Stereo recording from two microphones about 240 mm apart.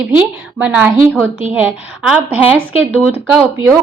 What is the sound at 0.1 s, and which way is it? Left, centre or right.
A woman's voice, centre.